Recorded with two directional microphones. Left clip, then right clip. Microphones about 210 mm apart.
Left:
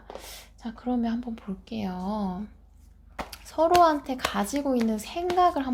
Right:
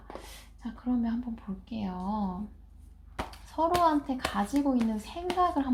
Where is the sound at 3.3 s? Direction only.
50° left (ahead or behind).